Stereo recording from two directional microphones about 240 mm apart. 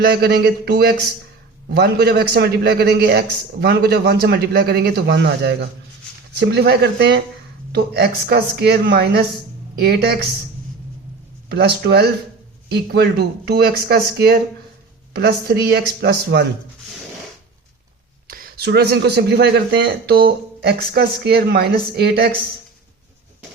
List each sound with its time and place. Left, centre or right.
0.0 s a man's voice: right
11.4 s a man's voice: right
18.3 s speech: right